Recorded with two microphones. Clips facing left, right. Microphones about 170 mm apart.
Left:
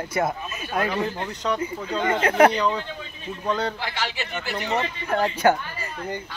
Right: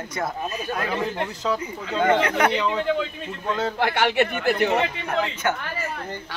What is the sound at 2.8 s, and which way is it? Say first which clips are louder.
Speech: right 13 dB; 85° right.